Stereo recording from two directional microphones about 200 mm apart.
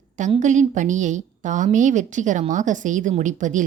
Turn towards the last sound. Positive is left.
turn(degrees=-40)  # may be behind; listen again after turning